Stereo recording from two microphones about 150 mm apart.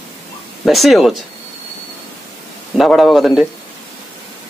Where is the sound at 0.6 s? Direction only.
Centre (ahead or behind).